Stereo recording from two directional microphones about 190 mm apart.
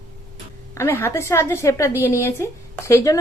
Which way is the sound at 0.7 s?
15° left (ahead or behind).